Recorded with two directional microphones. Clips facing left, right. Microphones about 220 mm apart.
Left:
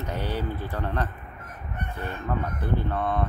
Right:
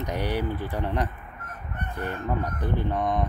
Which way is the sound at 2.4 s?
15° right (ahead or behind).